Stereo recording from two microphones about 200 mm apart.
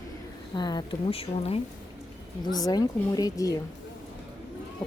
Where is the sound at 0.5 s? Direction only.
20° left (ahead or behind).